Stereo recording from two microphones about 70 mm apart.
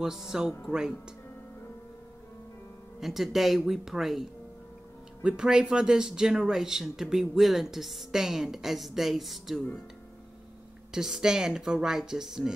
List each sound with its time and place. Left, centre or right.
0.0 s speech: centre
3.0 s speech: centre
10.9 s speech: centre